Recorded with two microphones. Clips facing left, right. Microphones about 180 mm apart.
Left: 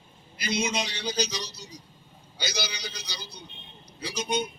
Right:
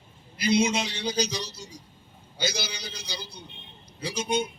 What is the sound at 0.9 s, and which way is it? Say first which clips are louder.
A man's voice: right 2 dB; 50° right (ahead or behind).